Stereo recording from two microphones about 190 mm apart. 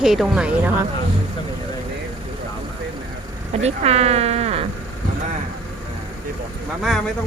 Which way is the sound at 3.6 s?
35° right (ahead or behind).